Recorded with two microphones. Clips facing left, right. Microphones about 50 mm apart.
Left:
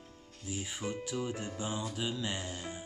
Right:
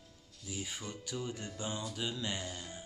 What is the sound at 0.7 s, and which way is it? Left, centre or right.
Music, centre.